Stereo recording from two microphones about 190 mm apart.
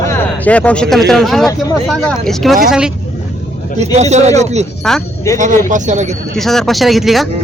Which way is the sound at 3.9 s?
35° right (ahead or behind).